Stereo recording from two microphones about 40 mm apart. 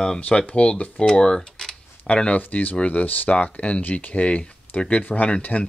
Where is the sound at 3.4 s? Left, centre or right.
Left.